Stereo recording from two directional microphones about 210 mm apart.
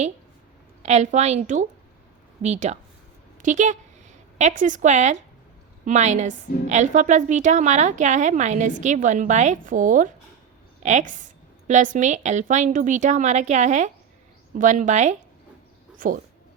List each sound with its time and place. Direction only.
0.8 s a woman's voice: 35° right (ahead or behind)